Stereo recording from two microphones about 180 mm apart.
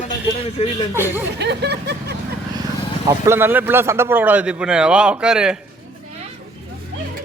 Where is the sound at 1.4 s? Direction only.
70° right (ahead or behind).